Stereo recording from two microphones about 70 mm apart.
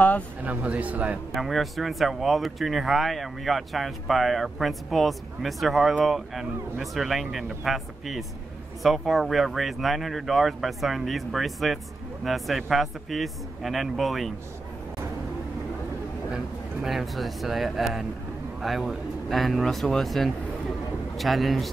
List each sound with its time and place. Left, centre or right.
0.4 s speech: right
1.3 s speech: centre
16.8 s speech: centre